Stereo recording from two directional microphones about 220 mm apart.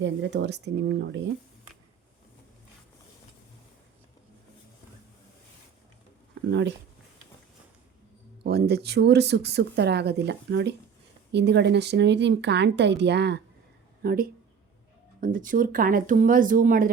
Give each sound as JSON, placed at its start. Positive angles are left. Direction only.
{"t": 0.0, "sound": "speech", "side_deg": -55}
{"t": 6.5, "sound": "speech", "side_deg": -50}
{"t": 8.4, "sound": "speech", "side_deg": -45}